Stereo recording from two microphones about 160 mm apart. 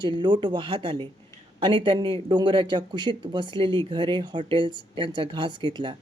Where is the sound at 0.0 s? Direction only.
30° right (ahead or behind).